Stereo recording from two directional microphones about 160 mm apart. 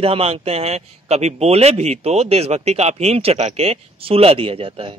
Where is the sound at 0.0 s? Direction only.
35° right (ahead or behind).